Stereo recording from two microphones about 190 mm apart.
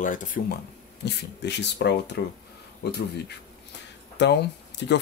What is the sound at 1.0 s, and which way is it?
Speech, 65° left (ahead or behind).